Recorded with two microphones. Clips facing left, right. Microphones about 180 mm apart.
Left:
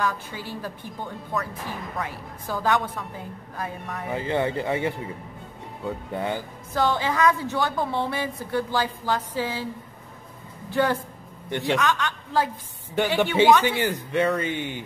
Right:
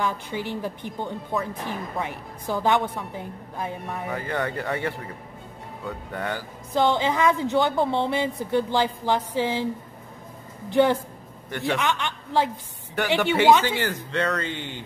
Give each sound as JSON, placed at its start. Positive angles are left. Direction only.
{"t": 0.0, "sound": "a woman's voice", "side_deg": -20}
{"t": 4.1, "sound": "speech", "side_deg": 20}
{"t": 6.7, "sound": "a woman's voice", "side_deg": -20}
{"t": 10.7, "sound": "a woman's voice", "side_deg": -20}
{"t": 12.9, "sound": "speech", "side_deg": 15}